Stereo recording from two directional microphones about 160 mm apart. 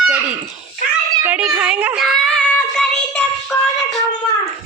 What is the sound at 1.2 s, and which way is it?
Child singing, 10° right (ahead or behind).